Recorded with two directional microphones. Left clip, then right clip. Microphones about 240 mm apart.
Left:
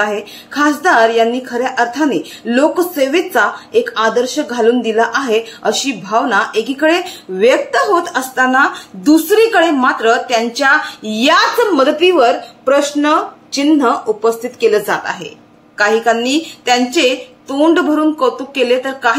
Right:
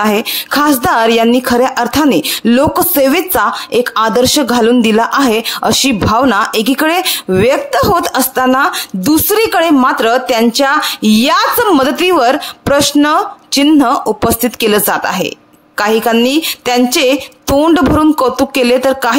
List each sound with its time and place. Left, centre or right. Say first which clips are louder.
0.1 s speech: right 8 dB; right